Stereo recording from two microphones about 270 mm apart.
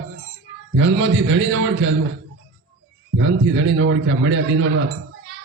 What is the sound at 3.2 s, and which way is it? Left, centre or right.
A man's voice, right.